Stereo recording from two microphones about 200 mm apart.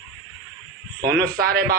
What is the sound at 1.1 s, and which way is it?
Music, 50° right (ahead or behind).